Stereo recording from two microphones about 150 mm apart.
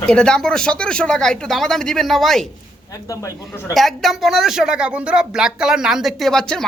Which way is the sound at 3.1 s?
20° left (ahead or behind).